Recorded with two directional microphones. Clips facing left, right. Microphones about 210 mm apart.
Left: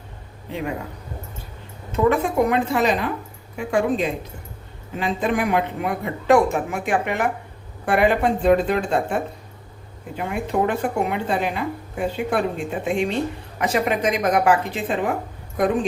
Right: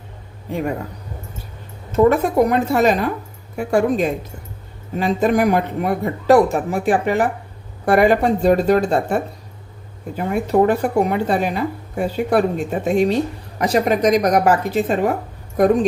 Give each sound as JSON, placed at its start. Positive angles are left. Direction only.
{"t": 2.0, "sound": "a woman's voice", "side_deg": -40}
{"t": 10.2, "sound": "a woman's voice", "side_deg": -40}